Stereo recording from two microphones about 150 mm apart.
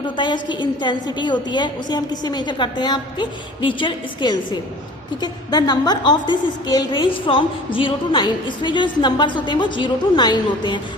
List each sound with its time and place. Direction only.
0.2 s a woman's voice: 30° left (ahead or behind)